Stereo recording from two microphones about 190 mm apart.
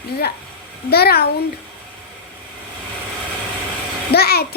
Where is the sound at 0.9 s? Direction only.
55° left (ahead or behind).